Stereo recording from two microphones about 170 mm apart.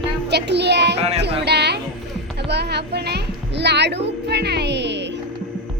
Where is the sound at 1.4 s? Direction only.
75° right (ahead or behind); by 5.1 s 90° right.